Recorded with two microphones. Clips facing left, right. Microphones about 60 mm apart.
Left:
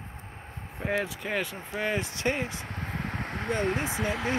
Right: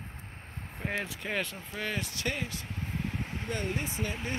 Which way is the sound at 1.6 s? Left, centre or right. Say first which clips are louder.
Left 5 dB; left.